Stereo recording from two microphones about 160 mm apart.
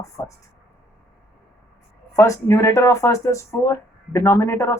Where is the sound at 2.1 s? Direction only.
20° left (ahead or behind).